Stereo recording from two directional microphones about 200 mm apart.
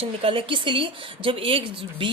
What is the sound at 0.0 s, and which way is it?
A woman's voice, 30° right (ahead or behind).